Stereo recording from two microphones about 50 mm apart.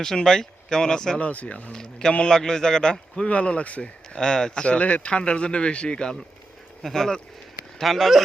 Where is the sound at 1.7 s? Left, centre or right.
Centre.